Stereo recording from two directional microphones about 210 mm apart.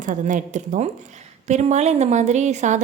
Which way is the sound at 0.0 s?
35° right (ahead or behind).